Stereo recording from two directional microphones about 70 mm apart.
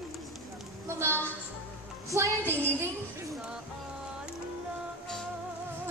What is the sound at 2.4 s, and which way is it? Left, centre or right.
Speech, right.